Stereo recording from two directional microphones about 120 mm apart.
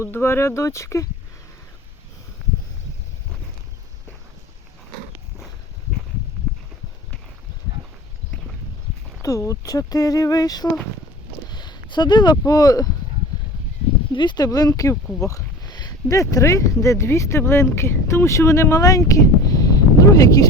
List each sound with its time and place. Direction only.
0.0 s speech: 20° left (ahead or behind)
9.2 s speech: 30° left (ahead or behind)
11.4 s a sound: 35° left (ahead or behind)
12.5 s speech: 30° left (ahead or behind)
14.1 s speech: 40° left (ahead or behind)
15.2 s a sound: 30° left (ahead or behind)
16.3 s speech: 25° left (ahead or behind)